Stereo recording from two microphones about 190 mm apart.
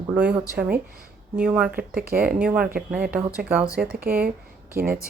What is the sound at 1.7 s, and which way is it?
Speech, 50° right (ahead or behind).